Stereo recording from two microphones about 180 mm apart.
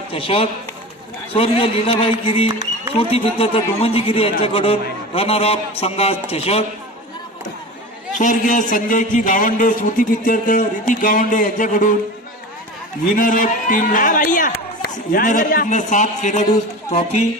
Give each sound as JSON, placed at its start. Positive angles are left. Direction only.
{"t": 0.1, "sound": "speech", "side_deg": 30}
{"t": 8.2, "sound": "speech", "side_deg": 45}
{"t": 13.0, "sound": "speech", "side_deg": 50}